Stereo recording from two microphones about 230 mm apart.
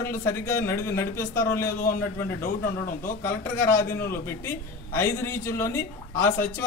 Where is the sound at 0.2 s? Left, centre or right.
Centre.